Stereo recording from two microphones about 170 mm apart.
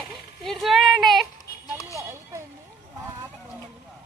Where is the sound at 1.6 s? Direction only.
20° left (ahead or behind).